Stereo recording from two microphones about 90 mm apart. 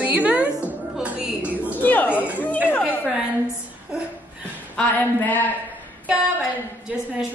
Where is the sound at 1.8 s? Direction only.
20° left (ahead or behind).